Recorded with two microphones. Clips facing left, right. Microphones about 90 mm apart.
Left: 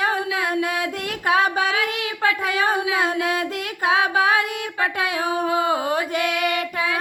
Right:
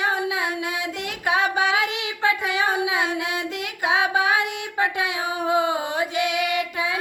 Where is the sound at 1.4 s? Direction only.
40° left (ahead or behind).